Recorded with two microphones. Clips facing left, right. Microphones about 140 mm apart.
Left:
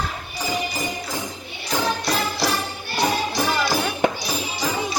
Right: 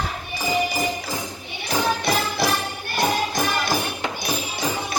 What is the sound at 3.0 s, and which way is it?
Music, 50° right (ahead or behind).